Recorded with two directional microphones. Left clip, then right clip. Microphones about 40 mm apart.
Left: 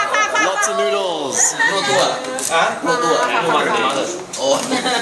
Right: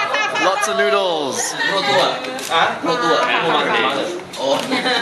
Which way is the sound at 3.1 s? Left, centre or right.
Right.